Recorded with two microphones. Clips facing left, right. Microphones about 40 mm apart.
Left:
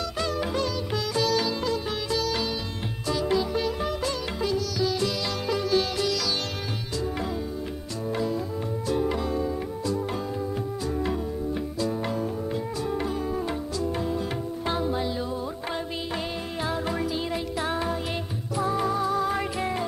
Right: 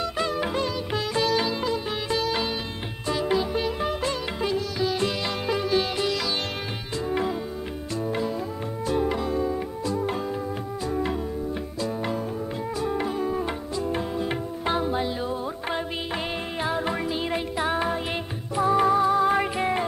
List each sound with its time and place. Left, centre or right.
0.0 s music: right
8.9 s music: right
12.8 s music: right
14.6 s music: right